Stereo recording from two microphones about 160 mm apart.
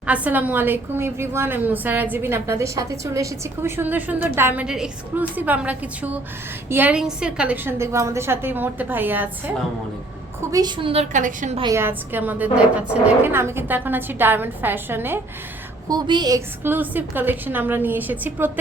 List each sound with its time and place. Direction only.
0.0 s a woman's voice: 10° right (ahead or behind)
10.5 s a woman's voice: 25° right (ahead or behind)
11.1 s a woman's voice: 55° right (ahead or behind)
11.7 s a woman's voice: 15° right (ahead or behind)
15.9 s a woman's voice: 25° right (ahead or behind)
16.6 s a woman's voice: 10° right (ahead or behind)